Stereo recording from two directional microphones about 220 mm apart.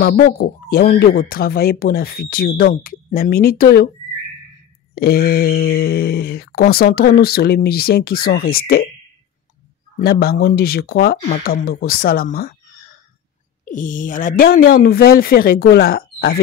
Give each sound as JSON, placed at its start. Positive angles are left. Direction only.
{"t": 0.0, "sound": "speech", "side_deg": 45}
{"t": 4.9, "sound": "speech", "side_deg": 45}
{"t": 9.9, "sound": "speech", "side_deg": 40}
{"t": 13.7, "sound": "speech", "side_deg": 35}